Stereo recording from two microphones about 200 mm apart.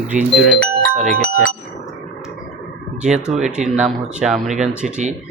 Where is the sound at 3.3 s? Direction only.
5° right (ahead or behind).